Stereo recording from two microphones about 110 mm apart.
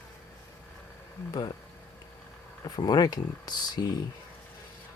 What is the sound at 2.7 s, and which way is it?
Speech, 40° left (ahead or behind).